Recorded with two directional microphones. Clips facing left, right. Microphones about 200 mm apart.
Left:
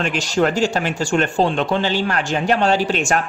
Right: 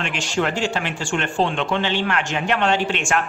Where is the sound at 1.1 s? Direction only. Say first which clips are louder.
Left 4 dB; 40° left (ahead or behind).